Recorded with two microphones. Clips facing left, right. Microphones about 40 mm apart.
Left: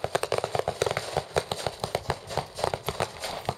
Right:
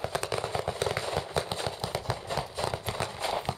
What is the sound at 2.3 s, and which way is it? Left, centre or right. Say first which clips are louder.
Fireworks: even; centre.